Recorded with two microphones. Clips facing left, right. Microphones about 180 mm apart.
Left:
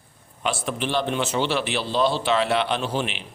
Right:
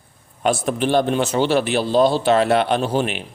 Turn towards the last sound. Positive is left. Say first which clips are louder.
# right 6 dB
turn(degrees=-45)  # may be behind; listen again after turning